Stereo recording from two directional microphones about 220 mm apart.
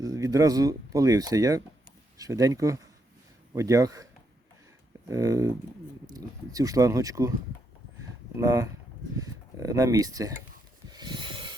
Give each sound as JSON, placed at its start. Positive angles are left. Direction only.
{"t": 0.0, "sound": "speech", "side_deg": -15}
{"t": 8.4, "sound": "speech", "side_deg": -15}
{"t": 10.8, "sound": "rub", "side_deg": -20}